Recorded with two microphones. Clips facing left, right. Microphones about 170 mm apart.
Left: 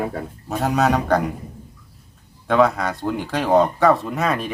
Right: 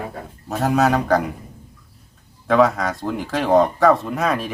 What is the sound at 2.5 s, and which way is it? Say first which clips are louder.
Speech: right 1 dB; centre (ahead or behind).